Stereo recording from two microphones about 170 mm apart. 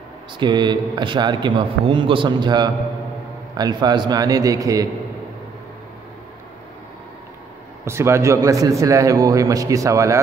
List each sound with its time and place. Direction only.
0.4 s a man's voice: 25° right (ahead or behind)
7.8 s a man's voice: 15° right (ahead or behind)